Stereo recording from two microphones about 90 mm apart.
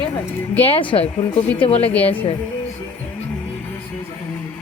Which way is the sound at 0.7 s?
80° left.